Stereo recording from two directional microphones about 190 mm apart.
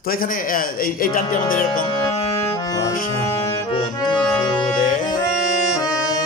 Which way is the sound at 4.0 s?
20° left (ahead or behind).